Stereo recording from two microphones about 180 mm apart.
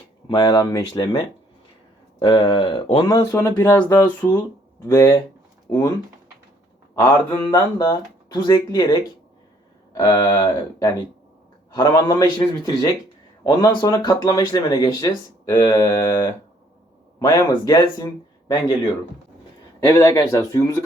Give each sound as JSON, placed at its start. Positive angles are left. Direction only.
{"t": 0.3, "sound": "speech", "side_deg": 20}
{"t": 7.3, "sound": "speech", "side_deg": 15}
{"t": 19.8, "sound": "speech", "side_deg": 15}